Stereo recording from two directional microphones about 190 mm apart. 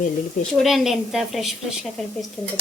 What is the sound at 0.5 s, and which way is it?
A woman's voice, centre (ahead or behind).